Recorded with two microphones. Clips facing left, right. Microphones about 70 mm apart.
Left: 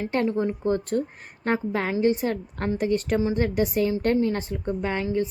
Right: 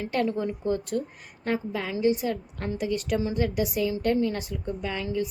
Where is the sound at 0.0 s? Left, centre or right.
Left.